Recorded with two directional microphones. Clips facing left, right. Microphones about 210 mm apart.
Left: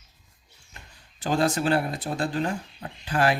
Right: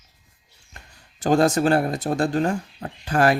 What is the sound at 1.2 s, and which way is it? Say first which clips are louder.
Speech: right 6 dB; 45° right (ahead or behind).